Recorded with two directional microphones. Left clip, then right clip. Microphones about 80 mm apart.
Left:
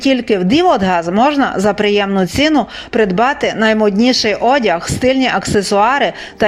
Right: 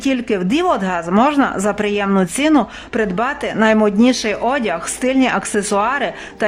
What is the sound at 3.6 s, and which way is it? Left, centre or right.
Speech, centre.